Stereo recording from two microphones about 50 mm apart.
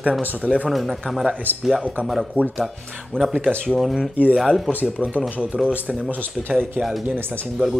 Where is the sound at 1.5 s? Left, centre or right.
Right.